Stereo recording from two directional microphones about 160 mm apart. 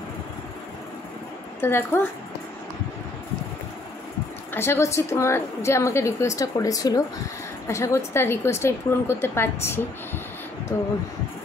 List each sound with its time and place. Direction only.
1.6 s a woman's voice: 15° left (ahead or behind)
4.6 s a woman's voice: 15° left (ahead or behind)